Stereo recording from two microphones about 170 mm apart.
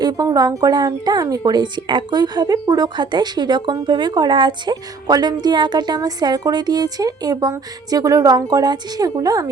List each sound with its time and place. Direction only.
0.0 s speech: 25° right (ahead or behind)